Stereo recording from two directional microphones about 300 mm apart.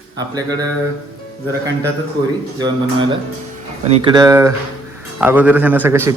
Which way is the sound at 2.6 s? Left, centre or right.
Centre.